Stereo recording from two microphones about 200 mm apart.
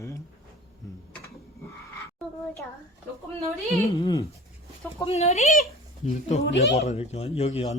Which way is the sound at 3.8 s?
20° left (ahead or behind).